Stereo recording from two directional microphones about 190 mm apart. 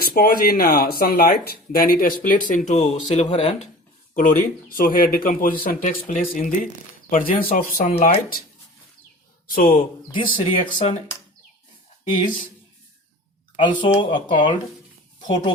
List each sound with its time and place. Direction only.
0.0 s speech: 50° left (ahead or behind); by 3.7 s 35° left (ahead or behind)
4.1 s speech: 45° left (ahead or behind)
9.5 s speech: 45° left (ahead or behind)
10.3 s speech: 30° left (ahead or behind)
13.6 s speech: 25° left (ahead or behind)